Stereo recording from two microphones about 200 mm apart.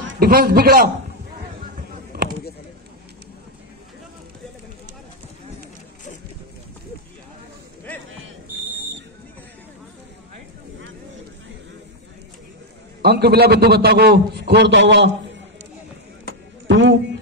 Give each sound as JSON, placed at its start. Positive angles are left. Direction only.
{"t": 0.2, "sound": "a man's voice", "side_deg": -50}
{"t": 13.0, "sound": "a man's voice", "side_deg": -55}
{"t": 16.6, "sound": "a sound", "side_deg": -65}